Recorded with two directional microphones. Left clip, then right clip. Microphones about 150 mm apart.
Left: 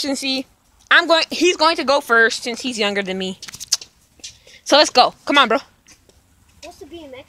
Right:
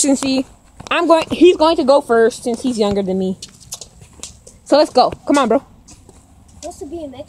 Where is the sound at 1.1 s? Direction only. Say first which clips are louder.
Right 5 dB; 20° left (ahead or behind).